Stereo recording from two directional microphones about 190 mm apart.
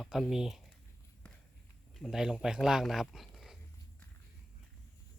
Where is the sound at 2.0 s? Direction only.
Centre (ahead or behind).